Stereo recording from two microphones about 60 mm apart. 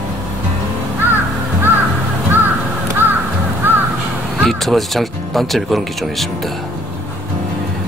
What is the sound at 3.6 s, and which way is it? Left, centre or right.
Crow, right.